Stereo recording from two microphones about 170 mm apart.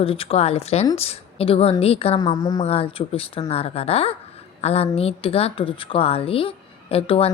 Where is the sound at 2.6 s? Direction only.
35° left (ahead or behind).